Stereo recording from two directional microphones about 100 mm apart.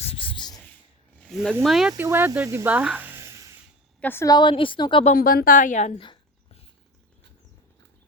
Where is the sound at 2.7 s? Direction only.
15° right (ahead or behind).